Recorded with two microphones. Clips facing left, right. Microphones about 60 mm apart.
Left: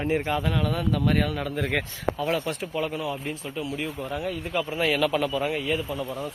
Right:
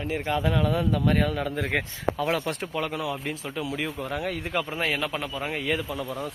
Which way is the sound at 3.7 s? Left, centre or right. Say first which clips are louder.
Even; right.